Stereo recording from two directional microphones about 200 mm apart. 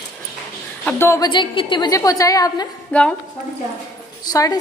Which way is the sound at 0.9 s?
10° left (ahead or behind).